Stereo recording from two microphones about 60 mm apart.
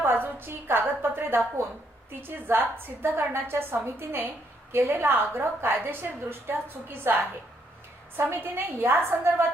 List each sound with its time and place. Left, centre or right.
0.0 s a woman's voice: right